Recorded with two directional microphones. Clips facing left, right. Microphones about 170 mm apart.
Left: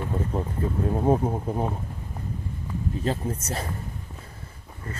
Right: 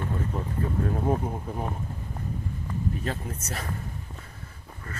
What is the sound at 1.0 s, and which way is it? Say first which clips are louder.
Speech: left 5 dB; 30° left (ahead or behind).